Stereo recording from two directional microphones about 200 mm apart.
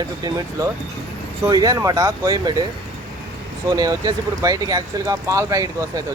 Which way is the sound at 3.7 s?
20° right (ahead or behind).